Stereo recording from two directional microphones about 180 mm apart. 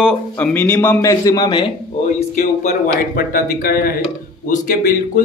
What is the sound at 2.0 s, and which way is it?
Speech, 40° left (ahead or behind).